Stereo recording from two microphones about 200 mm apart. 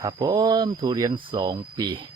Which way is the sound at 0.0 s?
20° right (ahead or behind).